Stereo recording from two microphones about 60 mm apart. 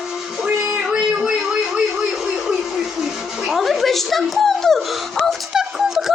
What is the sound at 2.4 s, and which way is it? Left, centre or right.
Music, centre.